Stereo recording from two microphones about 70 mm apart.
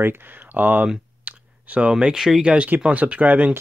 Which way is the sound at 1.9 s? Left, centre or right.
Centre.